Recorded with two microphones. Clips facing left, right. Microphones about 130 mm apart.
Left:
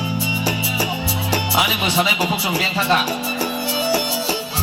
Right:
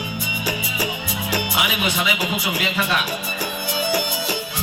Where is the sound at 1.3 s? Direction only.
35° left (ahead or behind).